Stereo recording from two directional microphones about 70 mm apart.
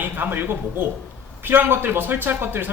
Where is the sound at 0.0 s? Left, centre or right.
Right.